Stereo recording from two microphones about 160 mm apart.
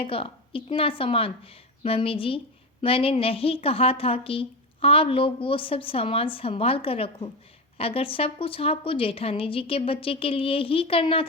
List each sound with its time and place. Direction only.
0.0 s a woman's voice: 35° left (ahead or behind)